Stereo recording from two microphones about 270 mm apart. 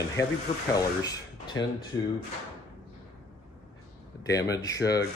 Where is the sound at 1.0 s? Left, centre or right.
Centre.